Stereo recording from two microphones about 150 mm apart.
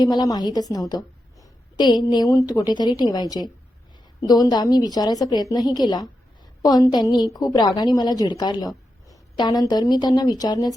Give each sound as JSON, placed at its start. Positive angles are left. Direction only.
{"t": 0.0, "sound": "a woman's voice", "side_deg": 30}